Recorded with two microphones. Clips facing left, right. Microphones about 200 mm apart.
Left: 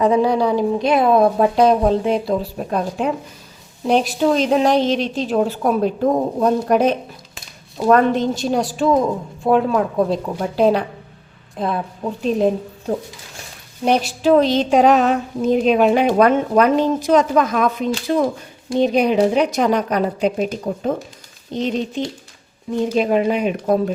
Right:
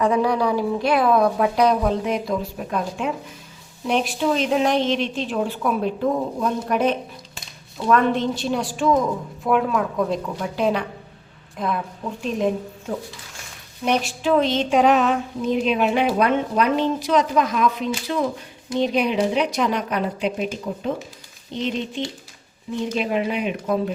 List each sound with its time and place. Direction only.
0.0 s a woman's voice: 25° left (ahead or behind)
13.8 s a woman's voice: 35° left (ahead or behind)